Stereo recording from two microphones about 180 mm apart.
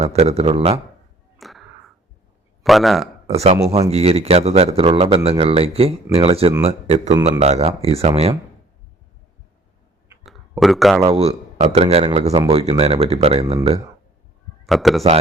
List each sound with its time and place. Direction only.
0.0 s speech: 35° right (ahead or behind)
1.4 s a sound: centre (ahead or behind)
2.6 s a man's voice: centre (ahead or behind)
3.2 s speech: 35° right (ahead or behind)
10.2 s a sound: centre (ahead or behind)
11.1 s speech: 35° right (ahead or behind)
14.7 s a man's voice: centre (ahead or behind)